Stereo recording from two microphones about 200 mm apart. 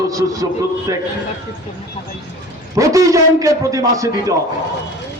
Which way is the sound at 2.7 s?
15° right (ahead or behind).